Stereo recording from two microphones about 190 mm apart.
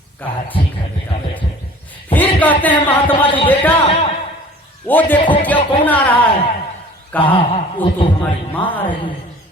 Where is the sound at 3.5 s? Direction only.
10° left (ahead or behind).